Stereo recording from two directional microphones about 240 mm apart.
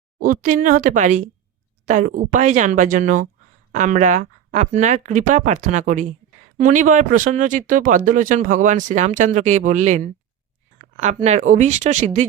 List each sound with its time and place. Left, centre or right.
0.2 s speech: right